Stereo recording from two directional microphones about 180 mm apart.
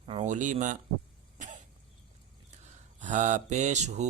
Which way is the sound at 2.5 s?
40° right (ahead or behind).